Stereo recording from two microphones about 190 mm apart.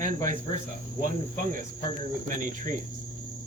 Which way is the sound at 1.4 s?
45° right (ahead or behind).